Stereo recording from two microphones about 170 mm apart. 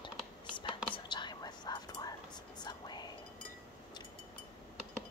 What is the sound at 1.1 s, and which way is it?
Whispering, 25° left (ahead or behind).